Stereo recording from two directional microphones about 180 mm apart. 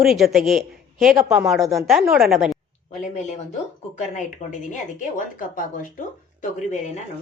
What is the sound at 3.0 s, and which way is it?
A woman's voice, 40° left (ahead or behind).